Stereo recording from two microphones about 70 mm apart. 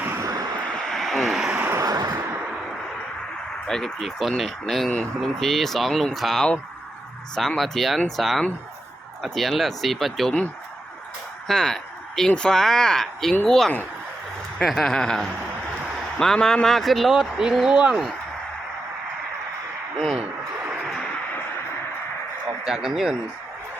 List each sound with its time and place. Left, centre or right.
0.2 s vehicle: right
0.7 s vehicle: centre
1.7 s a sound: right
3.7 s speech: centre
11.4 s speech: centre
22.6 s speech: centre